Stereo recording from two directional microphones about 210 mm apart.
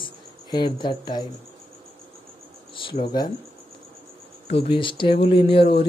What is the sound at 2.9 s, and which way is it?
Speech, 25° left (ahead or behind).